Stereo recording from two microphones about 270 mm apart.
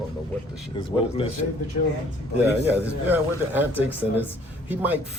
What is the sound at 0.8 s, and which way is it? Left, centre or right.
Speech, centre.